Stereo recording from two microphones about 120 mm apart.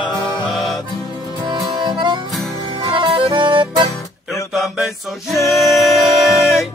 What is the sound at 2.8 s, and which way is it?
Music, 50° right (ahead or behind).